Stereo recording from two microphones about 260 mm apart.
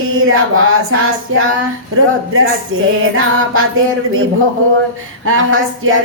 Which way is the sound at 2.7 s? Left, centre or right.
Right.